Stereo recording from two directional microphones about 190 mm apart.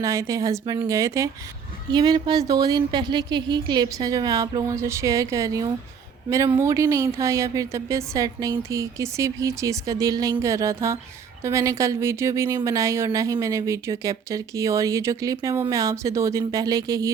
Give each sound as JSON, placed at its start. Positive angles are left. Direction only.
{"t": 0.0, "sound": "speech", "side_deg": -15}